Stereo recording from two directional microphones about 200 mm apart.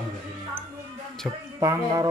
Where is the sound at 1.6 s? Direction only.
15° right (ahead or behind).